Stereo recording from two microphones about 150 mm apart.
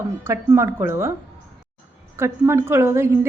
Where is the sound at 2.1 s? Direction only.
15° right (ahead or behind).